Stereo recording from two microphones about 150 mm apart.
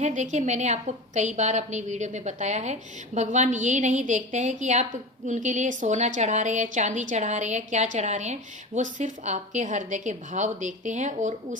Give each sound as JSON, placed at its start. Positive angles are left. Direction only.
{"t": 0.0, "sound": "a woman's voice", "side_deg": -55}